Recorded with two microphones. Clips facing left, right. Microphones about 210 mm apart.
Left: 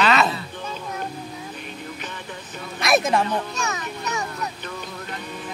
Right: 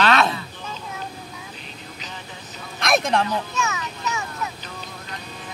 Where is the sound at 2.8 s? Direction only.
Centre (ahead or behind).